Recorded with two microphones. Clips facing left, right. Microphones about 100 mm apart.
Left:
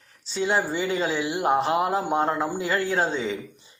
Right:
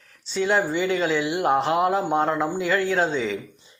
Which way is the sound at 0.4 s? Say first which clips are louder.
Right 2 dB; 35° left (ahead or behind).